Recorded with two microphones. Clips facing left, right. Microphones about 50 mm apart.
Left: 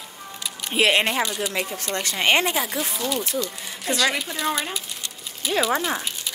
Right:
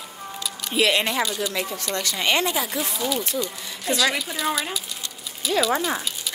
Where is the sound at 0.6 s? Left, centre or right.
Left.